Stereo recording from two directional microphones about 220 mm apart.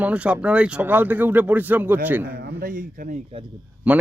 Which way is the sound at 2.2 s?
45° right (ahead or behind).